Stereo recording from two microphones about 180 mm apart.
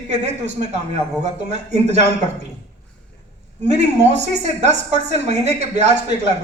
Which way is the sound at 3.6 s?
40° right (ahead or behind).